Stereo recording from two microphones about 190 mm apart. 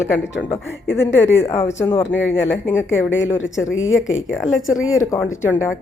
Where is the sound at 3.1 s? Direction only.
85° left.